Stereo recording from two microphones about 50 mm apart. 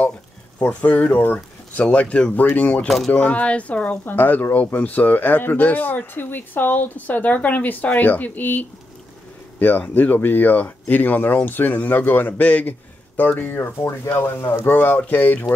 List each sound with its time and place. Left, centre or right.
0.6 s speech: left
4.0 s speech: left
15.0 s speech: left